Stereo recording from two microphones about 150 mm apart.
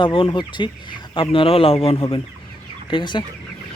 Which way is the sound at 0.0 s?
35° left (ahead or behind).